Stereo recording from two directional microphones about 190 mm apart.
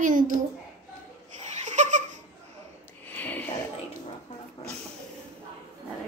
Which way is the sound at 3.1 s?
10° left (ahead or behind).